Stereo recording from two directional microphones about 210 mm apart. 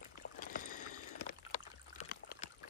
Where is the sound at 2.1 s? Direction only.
45° left (ahead or behind).